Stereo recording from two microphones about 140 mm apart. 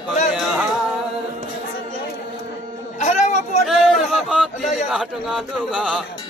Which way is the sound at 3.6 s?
Centre (ahead or behind).